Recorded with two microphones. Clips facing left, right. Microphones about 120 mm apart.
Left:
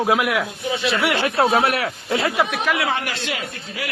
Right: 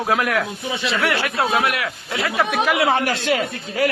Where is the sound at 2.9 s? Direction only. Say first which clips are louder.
Right 6 dB; 45° right (ahead or behind).